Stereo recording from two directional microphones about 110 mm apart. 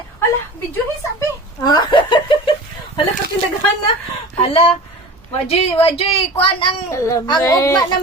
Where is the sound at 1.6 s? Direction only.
40° left (ahead or behind).